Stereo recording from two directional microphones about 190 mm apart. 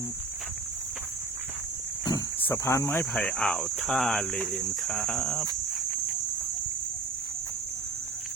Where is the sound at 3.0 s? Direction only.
5° left (ahead or behind).